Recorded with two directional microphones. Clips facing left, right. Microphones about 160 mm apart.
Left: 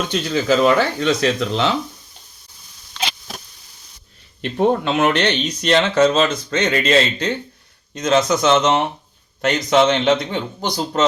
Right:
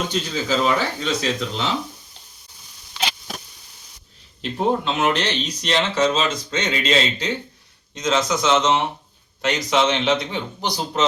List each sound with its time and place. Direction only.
0.1 s speech: 65° left (ahead or behind)
3.0 s insect: 10° right (ahead or behind)
4.8 s a man's voice: 65° left (ahead or behind)